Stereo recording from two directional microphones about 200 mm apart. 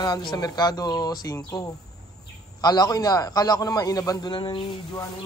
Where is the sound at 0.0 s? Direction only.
20° left (ahead or behind).